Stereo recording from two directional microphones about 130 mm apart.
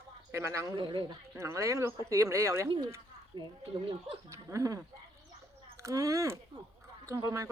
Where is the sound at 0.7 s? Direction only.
40° right (ahead or behind).